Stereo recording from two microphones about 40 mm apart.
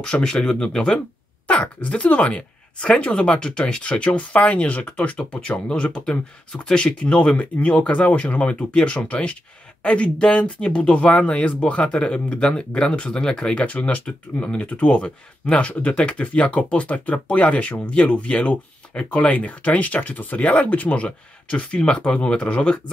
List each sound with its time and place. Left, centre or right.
0.0 s speech: centre
1.5 s speech: left
5.7 s speech: left
13.6 s speech: left